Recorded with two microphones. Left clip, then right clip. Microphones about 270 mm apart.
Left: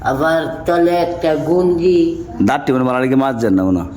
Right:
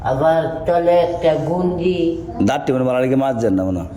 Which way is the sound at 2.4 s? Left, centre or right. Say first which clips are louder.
Left 3 dB; left.